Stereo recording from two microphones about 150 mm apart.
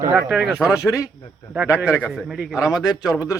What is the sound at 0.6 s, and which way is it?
Speech, 20° left (ahead or behind).